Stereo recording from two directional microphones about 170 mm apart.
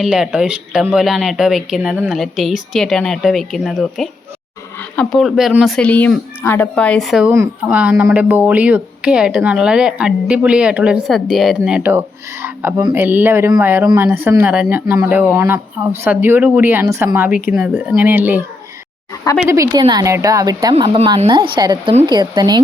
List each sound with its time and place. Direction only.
0.0 s a woman's voice: 5° right (ahead or behind); by 22.6 s 25° right (ahead or behind)